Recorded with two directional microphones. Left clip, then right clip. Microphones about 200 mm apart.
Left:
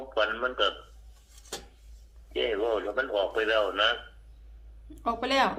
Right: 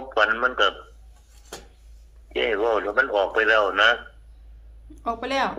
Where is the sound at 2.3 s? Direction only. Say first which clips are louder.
Right 6 dB; 55° right (ahead or behind).